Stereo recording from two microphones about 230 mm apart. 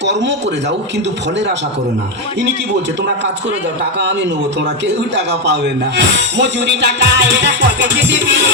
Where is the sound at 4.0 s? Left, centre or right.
Right.